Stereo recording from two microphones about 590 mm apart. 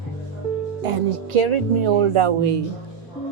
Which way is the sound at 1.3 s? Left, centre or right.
Right.